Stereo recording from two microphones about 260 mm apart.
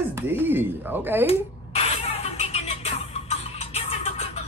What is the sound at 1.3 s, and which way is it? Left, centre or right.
Music, left.